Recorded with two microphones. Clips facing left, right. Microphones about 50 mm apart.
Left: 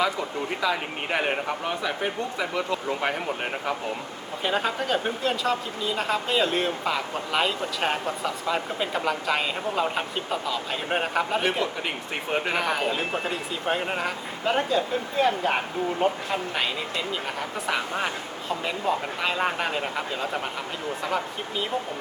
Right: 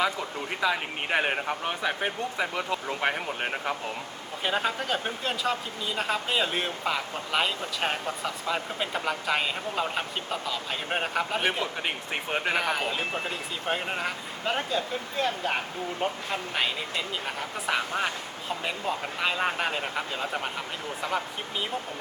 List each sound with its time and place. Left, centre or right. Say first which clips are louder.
0.6 s speech: right 1 dB; centre
1.6 s speech: left 1 dB; right; by 16.6 s centre
17.7 s speech: even; centre